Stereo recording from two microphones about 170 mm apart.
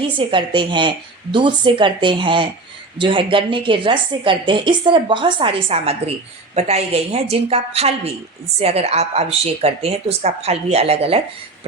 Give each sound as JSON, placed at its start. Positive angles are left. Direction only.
{"t": 0.2, "sound": "a woman's voice", "side_deg": -30}